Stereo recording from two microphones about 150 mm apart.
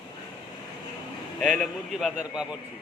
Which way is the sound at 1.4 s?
5° left (ahead or behind).